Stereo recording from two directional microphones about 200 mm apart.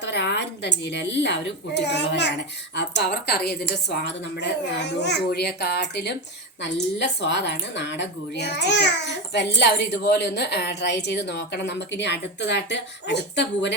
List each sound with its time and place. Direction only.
0.0 s a woman's voice: 60° left (ahead or behind)